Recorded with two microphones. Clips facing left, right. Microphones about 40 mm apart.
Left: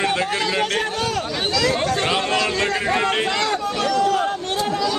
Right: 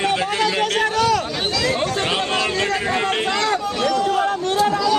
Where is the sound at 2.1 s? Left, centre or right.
Right.